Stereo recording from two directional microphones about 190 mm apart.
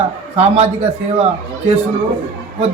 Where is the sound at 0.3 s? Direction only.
35° right (ahead or behind).